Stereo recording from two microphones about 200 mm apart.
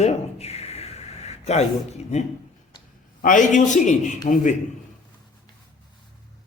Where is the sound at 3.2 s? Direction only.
40° left (ahead or behind).